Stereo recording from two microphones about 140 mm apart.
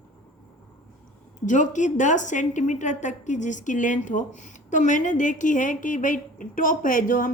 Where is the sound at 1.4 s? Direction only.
65° left (ahead or behind).